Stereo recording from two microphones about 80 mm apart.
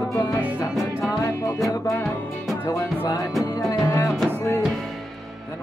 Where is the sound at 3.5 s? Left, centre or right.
Left.